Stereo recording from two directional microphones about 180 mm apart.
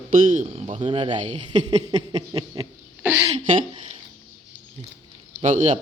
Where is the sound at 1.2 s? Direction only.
40° right (ahead or behind).